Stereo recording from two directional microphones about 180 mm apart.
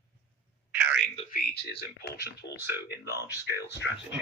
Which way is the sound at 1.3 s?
55° left (ahead or behind).